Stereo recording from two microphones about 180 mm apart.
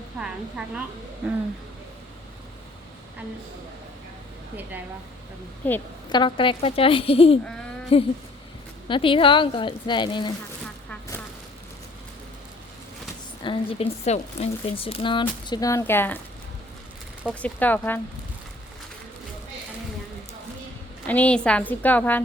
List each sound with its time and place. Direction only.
0.2 s a woman's voice: 5° right (ahead or behind)
5.6 s a woman's voice: 10° left (ahead or behind)
6.1 s speech: 25° left (ahead or behind)
7.9 s a sound: 30° left (ahead or behind)
8.9 s speech: 30° left (ahead or behind)
13.4 s speech: 30° left (ahead or behind); by 16.2 s 10° left (ahead or behind)
17.4 s a woman's voice: 10° left (ahead or behind)
21.1 s a woman's voice: 5° left (ahead or behind)